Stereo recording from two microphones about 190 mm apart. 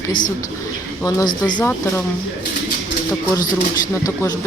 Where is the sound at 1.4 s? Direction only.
20° left (ahead or behind).